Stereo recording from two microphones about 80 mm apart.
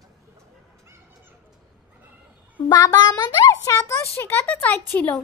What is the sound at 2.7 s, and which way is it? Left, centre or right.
Child singing, left.